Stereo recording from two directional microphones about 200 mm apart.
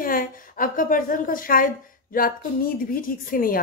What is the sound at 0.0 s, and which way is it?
A woman's voice, 45° left (ahead or behind).